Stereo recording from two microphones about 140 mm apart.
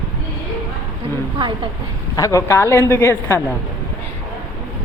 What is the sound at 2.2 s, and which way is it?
A woman's voice, 20° left (ahead or behind).